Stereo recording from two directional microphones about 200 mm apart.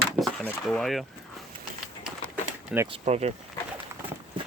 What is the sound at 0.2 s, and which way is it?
Speech, 5° left (ahead or behind).